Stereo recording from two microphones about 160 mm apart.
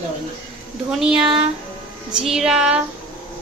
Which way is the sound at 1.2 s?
30° right (ahead or behind).